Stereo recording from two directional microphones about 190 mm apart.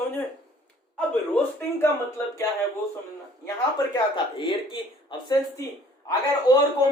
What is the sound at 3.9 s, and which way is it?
Speech, 25° left (ahead or behind).